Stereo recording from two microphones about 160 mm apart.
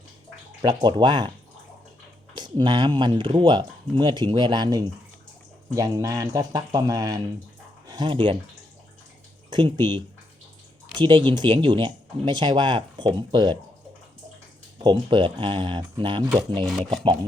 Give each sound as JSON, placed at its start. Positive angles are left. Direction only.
{"t": 0.6, "sound": "speech", "side_deg": -25}
{"t": 2.3, "sound": "speech", "side_deg": -30}
{"t": 9.5, "sound": "speech", "side_deg": -30}
{"t": 14.8, "sound": "speech", "side_deg": -30}
{"t": 16.6, "sound": "speech", "side_deg": 0}